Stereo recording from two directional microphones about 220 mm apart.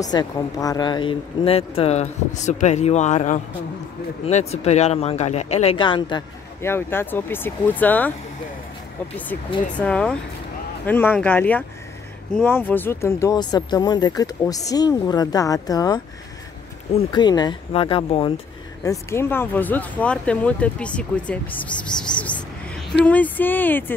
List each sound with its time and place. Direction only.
0.1 s speech: 15° left (ahead or behind)
9.8 s speech: 5° left (ahead or behind); by 18.3 s 25° left (ahead or behind)
18.9 s speech: 10° left (ahead or behind)
23.0 s speech: 5° left (ahead or behind)